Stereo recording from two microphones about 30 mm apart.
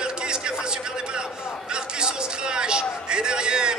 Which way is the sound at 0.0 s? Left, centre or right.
Right.